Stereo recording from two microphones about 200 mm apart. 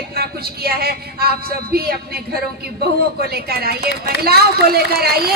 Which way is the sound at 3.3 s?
50° right (ahead or behind).